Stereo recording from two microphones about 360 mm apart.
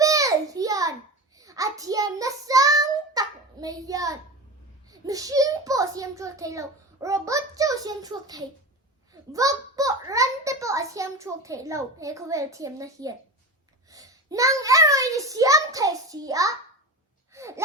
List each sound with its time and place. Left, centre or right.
0.0 s a sound: centre
1.4 s child singing: centre
4.9 s a child's voice: centre
17.3 s whimper: centre